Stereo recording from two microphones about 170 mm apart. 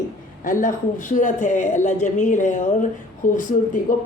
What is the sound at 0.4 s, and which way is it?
Speech, 50° left (ahead or behind).